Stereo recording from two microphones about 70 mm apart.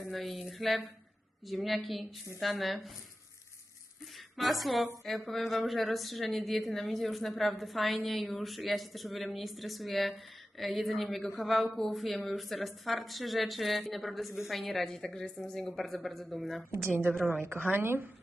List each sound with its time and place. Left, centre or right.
0.0 s speech: centre
4.4 s speech: centre
17.2 s speech: right